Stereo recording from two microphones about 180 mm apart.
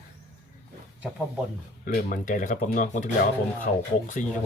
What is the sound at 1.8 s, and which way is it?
Speech, 50° left (ahead or behind).